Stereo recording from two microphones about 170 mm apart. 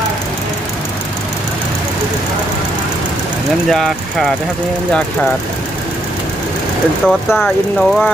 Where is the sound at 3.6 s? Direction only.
5° left (ahead or behind).